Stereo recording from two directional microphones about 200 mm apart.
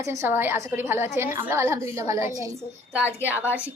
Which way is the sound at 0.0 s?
15° right (ahead or behind).